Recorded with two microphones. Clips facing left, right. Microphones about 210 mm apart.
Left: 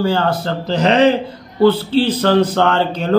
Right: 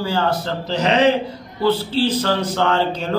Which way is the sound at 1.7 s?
60° left (ahead or behind).